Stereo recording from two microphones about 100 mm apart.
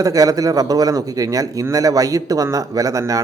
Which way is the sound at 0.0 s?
35° right (ahead or behind).